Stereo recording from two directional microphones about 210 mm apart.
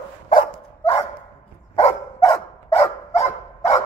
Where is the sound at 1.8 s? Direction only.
30° left (ahead or behind).